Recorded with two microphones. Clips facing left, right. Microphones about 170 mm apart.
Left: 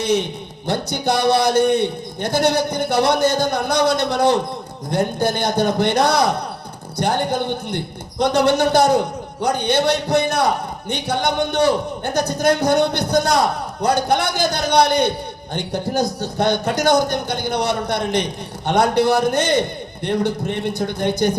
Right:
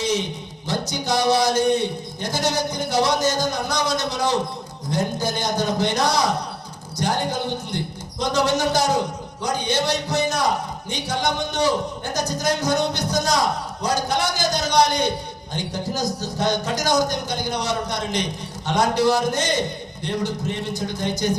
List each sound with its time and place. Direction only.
0.7 s a man's voice: 60° left (ahead or behind)